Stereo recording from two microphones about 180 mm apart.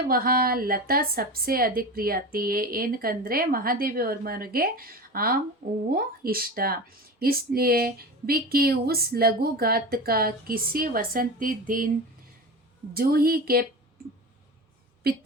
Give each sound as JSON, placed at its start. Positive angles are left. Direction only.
{"t": 0.1, "sound": "a woman's voice", "side_deg": -55}
{"t": 12.9, "sound": "a woman's voice", "side_deg": -55}